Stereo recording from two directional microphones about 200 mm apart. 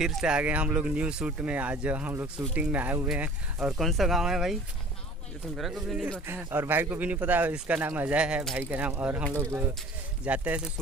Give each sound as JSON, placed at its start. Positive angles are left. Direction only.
{"t": 0.0, "sound": "speech", "side_deg": 0}
{"t": 5.5, "sound": "speech", "side_deg": 0}
{"t": 6.2, "sound": "speech", "side_deg": -10}